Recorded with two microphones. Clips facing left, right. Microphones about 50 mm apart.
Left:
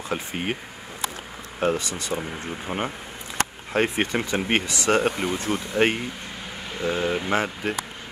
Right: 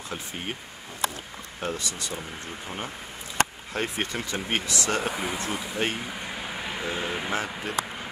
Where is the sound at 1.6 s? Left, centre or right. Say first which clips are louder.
Left 8 dB; left.